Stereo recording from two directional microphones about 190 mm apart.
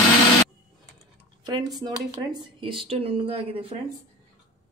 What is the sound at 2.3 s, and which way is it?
A woman's voice, 25° right (ahead or behind).